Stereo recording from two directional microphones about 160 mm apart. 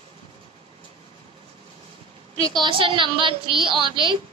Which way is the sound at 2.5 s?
30° right (ahead or behind).